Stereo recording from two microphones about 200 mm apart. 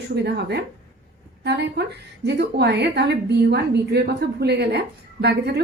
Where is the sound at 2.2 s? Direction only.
55° right (ahead or behind).